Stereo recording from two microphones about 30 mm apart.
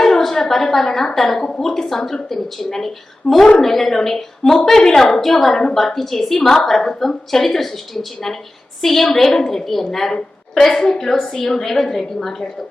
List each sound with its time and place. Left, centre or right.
0.0 s a sound: centre
1.1 s a woman's voice: centre
1.4 s a woman's voice: centre
8.8 s a woman's voice: centre
10.8 s a woman's voice: centre